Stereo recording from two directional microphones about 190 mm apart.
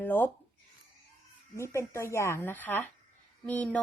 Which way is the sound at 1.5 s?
15° left (ahead or behind).